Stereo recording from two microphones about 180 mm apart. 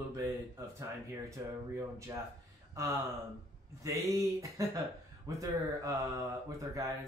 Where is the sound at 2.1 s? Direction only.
15° right (ahead or behind).